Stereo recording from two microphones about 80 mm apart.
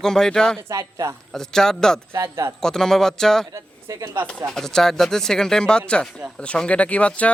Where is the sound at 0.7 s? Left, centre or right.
Right.